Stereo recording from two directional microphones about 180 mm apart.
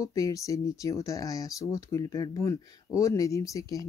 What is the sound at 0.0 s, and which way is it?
Speech, 20° left (ahead or behind).